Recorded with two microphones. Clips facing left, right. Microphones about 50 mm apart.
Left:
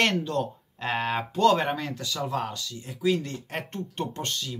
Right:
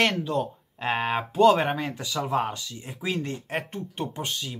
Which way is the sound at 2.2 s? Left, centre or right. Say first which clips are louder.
Right 5 dB; right.